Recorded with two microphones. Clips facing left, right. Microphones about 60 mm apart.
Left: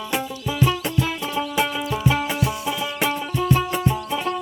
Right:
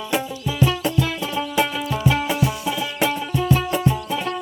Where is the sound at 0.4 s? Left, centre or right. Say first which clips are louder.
Left 1 dB; left.